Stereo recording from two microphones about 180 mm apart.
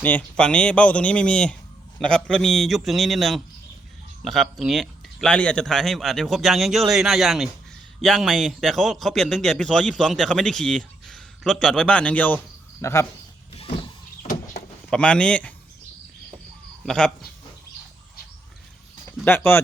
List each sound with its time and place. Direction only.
0.0 s a man's voice: 10° left (ahead or behind)
14.8 s a man's voice: 5° left (ahead or behind)
16.8 s a man's voice: 5° left (ahead or behind)
19.2 s speech: 10° left (ahead or behind)